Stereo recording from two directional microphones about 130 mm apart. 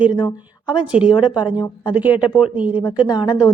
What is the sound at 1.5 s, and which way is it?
Speech, 35° left (ahead or behind).